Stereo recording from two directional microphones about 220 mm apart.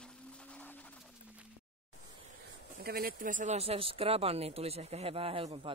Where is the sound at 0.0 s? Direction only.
5° left (ahead or behind).